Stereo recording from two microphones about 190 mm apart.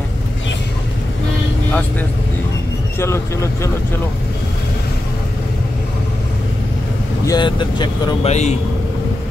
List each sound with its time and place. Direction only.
1.7 s speech: 10° left (ahead or behind)
7.2 s speech: 25° left (ahead or behind)
8.3 s a man's voice: 35° left (ahead or behind)